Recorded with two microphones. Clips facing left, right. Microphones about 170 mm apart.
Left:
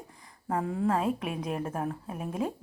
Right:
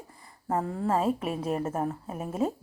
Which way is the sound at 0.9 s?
5° right (ahead or behind).